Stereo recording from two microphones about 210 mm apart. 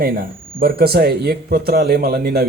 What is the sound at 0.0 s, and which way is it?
Speech, 45° right (ahead or behind).